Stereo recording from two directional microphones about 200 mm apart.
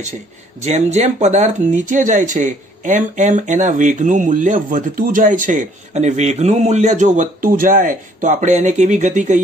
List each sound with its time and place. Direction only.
0.6 s speech: 35° right (ahead or behind)